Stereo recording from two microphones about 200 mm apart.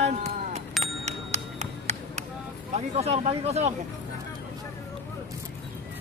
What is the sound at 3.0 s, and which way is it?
Speech, 30° right (ahead or behind).